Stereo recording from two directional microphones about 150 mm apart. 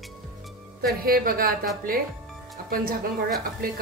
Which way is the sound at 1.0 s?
75° right (ahead or behind).